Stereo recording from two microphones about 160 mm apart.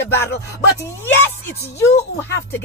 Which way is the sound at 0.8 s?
15° left (ahead or behind).